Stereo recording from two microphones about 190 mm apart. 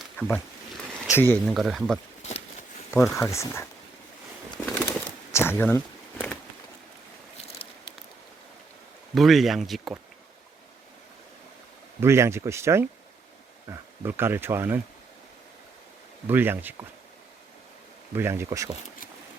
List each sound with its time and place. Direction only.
0.0 s wild animals: 5° left (ahead or behind)
1.1 s speech: 10° left (ahead or behind)
1.5 s speech: centre (ahead or behind)
3.2 s speech: 15° left (ahead or behind)
4.5 s a sound: 5° left (ahead or behind)
7.3 s a sound: 30° left (ahead or behind)
9.1 s speech: centre (ahead or behind)
11.9 s speech: 15° right (ahead or behind)
16.2 s speech: 10° right (ahead or behind)
18.1 s speech: 10° right (ahead or behind)